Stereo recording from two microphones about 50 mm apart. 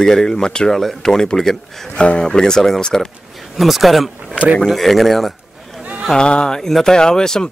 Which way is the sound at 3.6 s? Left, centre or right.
Centre.